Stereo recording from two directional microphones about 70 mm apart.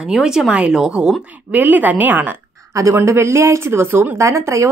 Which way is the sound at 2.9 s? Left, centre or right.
Right.